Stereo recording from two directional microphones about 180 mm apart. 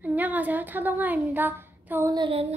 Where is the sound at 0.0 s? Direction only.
10° right (ahead or behind).